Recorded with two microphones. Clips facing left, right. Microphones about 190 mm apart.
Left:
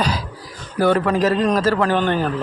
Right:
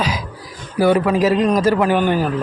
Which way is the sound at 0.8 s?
10° right (ahead or behind).